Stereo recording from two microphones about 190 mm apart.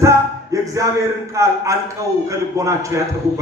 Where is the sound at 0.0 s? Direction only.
15° right (ahead or behind).